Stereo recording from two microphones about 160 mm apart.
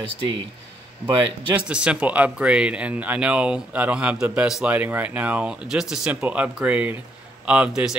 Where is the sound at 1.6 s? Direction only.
5° right (ahead or behind).